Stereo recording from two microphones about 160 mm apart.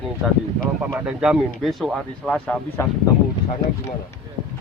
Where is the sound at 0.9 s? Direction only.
5° right (ahead or behind).